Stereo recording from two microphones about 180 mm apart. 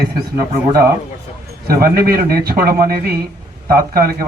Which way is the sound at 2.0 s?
55° right (ahead or behind).